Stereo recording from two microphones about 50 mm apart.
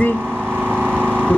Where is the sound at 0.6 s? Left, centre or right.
Right.